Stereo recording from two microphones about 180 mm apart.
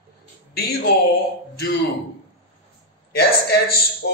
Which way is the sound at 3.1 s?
60° left (ahead or behind).